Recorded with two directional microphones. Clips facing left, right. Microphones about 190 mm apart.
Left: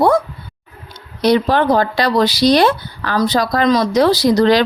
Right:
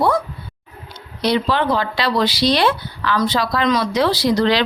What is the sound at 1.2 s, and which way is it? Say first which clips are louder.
Speech: left 5 dB; 45° left (ahead or behind).